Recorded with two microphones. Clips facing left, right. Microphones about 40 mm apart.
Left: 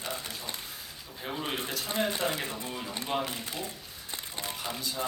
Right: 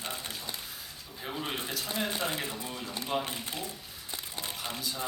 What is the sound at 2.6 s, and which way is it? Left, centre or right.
Speech, centre.